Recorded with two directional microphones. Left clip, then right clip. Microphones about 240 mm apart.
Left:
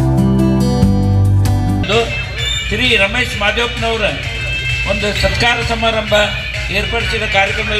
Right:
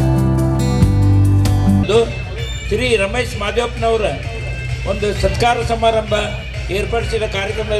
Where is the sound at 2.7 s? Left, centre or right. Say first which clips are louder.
Left 2 dB; right.